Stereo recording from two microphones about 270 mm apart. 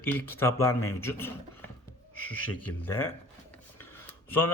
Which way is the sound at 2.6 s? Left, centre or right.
Centre.